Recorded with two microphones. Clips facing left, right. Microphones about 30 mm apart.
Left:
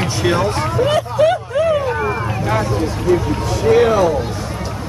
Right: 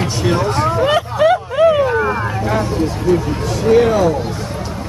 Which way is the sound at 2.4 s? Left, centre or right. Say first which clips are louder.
Even; centre.